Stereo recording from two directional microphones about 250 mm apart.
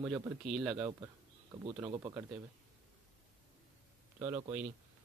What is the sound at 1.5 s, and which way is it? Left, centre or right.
Speech, centre.